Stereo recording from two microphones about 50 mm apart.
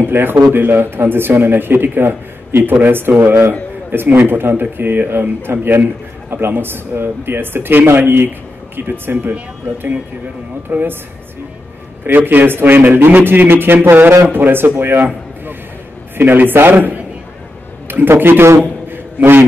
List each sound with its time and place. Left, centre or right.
0.0 s speech: right
10.7 s a man's voice: right
12.0 s a man's voice: right
16.2 s a man's voice: right
18.6 s a sound: right